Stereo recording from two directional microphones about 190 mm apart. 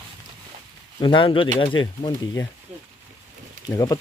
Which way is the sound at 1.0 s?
25° left (ahead or behind).